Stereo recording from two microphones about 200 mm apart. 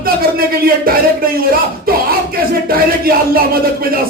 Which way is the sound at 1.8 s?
50° right (ahead or behind).